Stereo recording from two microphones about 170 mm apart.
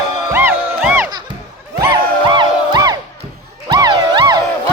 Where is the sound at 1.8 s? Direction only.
25° right (ahead or behind).